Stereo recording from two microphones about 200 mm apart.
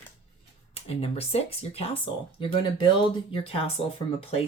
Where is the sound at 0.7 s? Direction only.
30° left (ahead or behind).